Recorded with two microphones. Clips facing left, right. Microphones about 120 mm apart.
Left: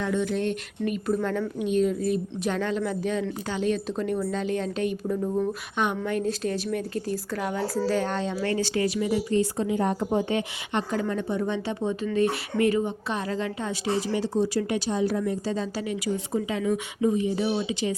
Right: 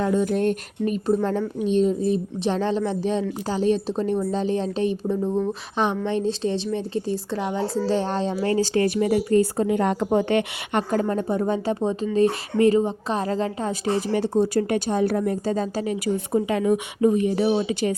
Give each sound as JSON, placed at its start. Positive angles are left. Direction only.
{"t": 0.0, "sound": "speech", "side_deg": -40}
{"t": 1.0, "sound": "speech", "side_deg": -30}
{"t": 8.8, "sound": "speech", "side_deg": -55}
{"t": 9.8, "sound": "speech", "side_deg": -90}
{"t": 11.1, "sound": "speech", "side_deg": -40}
{"t": 16.1, "sound": "speech", "side_deg": -60}